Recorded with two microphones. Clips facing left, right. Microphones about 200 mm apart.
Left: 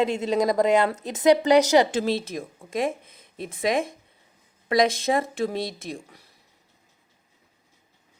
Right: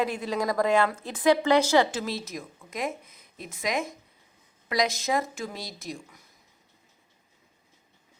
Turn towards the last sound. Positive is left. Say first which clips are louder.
# left 2 dB
turn(degrees=30)  # may be behind; listen again after turning